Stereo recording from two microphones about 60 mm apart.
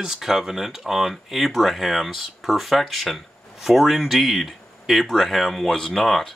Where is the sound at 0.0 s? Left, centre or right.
Centre.